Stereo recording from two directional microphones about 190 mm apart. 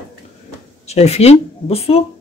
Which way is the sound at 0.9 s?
35° left (ahead or behind).